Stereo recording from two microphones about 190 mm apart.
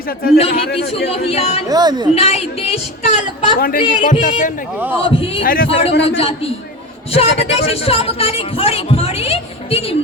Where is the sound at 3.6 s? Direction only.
50° left (ahead or behind).